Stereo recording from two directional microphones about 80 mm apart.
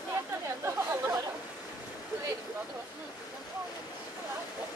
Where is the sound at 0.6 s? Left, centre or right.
Right.